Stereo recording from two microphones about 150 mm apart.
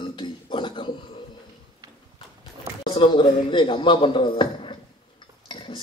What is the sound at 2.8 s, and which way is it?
A man's voice, 35° left (ahead or behind).